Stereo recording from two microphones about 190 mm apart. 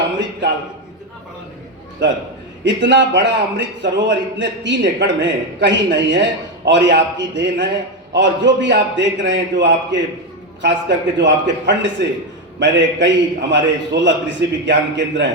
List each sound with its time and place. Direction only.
2.6 s a man's voice: 70° right (ahead or behind)